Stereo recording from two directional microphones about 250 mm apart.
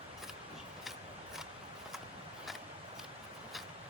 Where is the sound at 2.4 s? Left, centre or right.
Centre.